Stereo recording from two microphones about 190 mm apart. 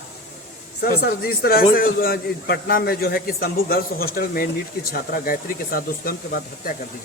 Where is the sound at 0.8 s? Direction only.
55° left (ahead or behind).